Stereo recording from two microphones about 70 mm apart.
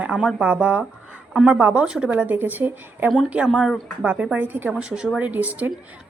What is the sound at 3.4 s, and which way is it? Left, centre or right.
Speech, centre.